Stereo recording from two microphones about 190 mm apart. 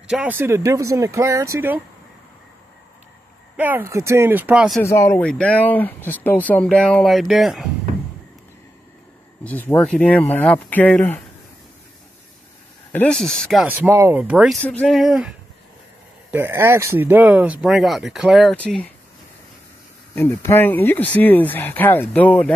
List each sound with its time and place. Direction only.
0.1 s speech: 10° right (ahead or behind)
3.5 s speech: 10° right (ahead or behind)
4.8 s speech: 15° left (ahead or behind); by 7.7 s centre (ahead or behind)
9.4 s speech: 10° left (ahead or behind)
12.9 s speech: 5° left (ahead or behind)
14.6 s speech: 5° left (ahead or behind)
20.2 s speech: 15° left (ahead or behind)